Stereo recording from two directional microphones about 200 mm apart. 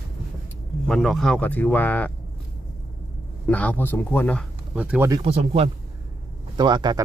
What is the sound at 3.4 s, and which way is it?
Speech, 5° left (ahead or behind).